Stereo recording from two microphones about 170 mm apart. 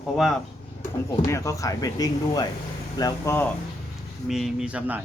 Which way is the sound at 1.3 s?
15° left (ahead or behind).